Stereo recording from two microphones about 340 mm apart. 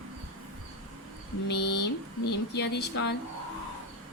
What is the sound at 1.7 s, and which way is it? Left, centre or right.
Speech, left.